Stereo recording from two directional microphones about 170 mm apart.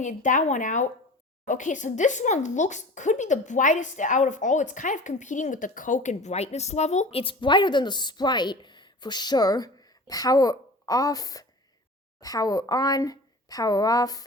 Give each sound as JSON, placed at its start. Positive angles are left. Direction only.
{"t": 0.0, "sound": "a woman's voice", "side_deg": 50}